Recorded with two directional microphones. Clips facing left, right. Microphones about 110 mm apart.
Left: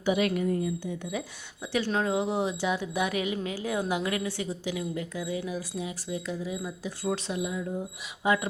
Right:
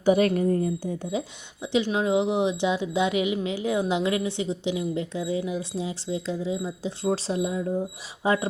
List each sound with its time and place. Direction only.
0.0 s a woman's voice: 40° right (ahead or behind)
1.6 s speech: 20° right (ahead or behind)